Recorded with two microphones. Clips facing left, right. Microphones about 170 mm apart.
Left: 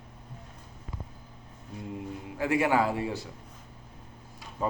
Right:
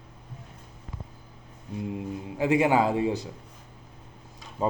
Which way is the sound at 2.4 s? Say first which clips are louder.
Right 3 dB; 20° right (ahead or behind).